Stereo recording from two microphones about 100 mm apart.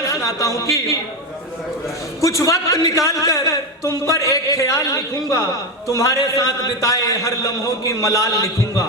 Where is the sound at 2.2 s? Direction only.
35° left (ahead or behind).